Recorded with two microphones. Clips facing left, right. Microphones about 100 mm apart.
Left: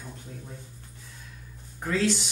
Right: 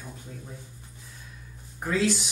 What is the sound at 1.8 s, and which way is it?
Speech, 10° right (ahead or behind).